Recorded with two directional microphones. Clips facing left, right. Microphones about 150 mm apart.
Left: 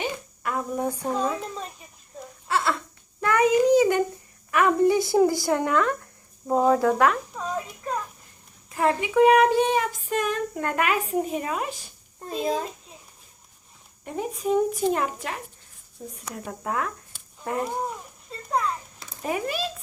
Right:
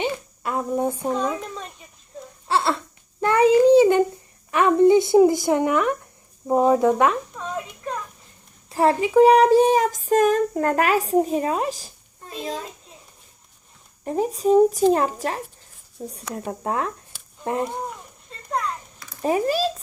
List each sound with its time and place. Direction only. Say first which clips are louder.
0.0 s a sound: right 4 dB; 25° right (ahead or behind)
2.5 s baby cry: right 3 dB; 30° right (ahead or behind)
3.2 s child singing: right 4 dB; 30° right (ahead or behind)
4.5 s a woman's voice: right 5 dB; 25° right (ahead or behind)
7.3 s a sound: even; centre (ahead or behind)
8.7 s speech: right 5 dB; 35° right (ahead or behind)
14.0 s a woman's voice: right 7 dB; 35° right (ahead or behind)
18.3 s children playing: left 1 dB; centre (ahead or behind)
19.2 s speech: right 7 dB; 35° right (ahead or behind)